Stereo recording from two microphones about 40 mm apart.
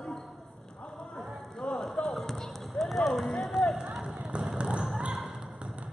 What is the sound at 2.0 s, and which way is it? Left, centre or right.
Basketball bounce, centre.